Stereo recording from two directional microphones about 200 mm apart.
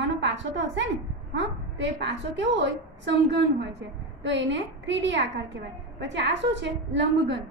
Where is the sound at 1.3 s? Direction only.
60° right (ahead or behind).